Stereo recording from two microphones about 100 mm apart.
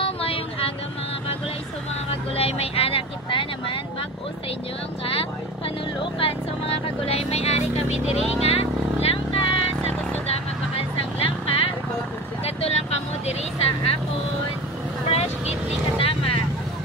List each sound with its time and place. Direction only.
0.0 s vehicle: 70° left (ahead or behind)
2.3 s speech: 80° left; by 3.8 s 60° left (ahead or behind)
6.1 s speech: 70° left (ahead or behind)
11.1 s vehicle: 75° left (ahead or behind)
12.4 s vehicle: 90° left
15.0 s vehicle: 90° left
16.0 s vehicle: 70° left (ahead or behind)